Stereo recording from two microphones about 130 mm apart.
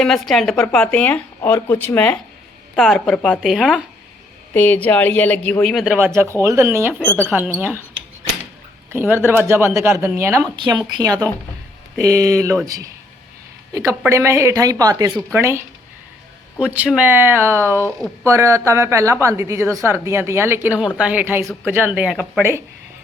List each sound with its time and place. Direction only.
0.0 s a woman's voice: centre (ahead or behind)
2.7 s a woman's voice: 5° left (ahead or behind)
4.5 s speech: 10° left (ahead or behind)
5.7 s a woman's voice: 5° right (ahead or behind)
6.0 s speech: 20° right (ahead or behind)
7.0 s speech: 10° left (ahead or behind)
7.5 s speech: 10° right (ahead or behind)
8.9 s speech: 15° right (ahead or behind)
10.6 s speech: 35° right (ahead or behind)
14.1 s speech: 20° right (ahead or behind)
16.7 s speech: 10° right (ahead or behind)
20.7 s speech: 5° right (ahead or behind)
22.1 s a woman's voice: centre (ahead or behind)